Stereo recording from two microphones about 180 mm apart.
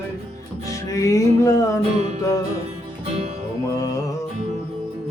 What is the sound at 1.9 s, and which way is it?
Music, 40° right (ahead or behind).